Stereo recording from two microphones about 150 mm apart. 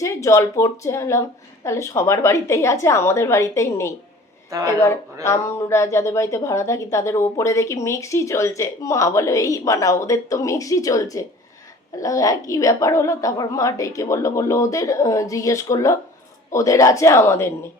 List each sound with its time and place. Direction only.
0.0 s speech: 20° left (ahead or behind)
5.2 s speech: 20° left (ahead or behind)